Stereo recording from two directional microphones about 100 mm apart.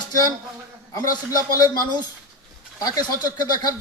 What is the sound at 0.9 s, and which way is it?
A man's voice, 40° left (ahead or behind).